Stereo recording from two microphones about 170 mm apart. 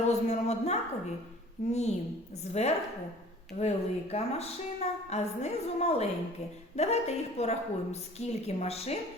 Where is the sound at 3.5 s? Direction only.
40° left (ahead or behind).